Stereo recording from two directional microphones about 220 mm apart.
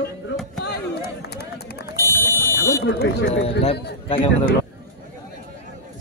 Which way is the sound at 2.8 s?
50° left (ahead or behind).